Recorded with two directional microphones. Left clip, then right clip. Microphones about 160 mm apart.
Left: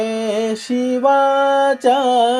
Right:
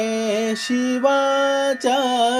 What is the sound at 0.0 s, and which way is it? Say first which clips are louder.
Music: left 2 dB; 10° right (ahead or behind).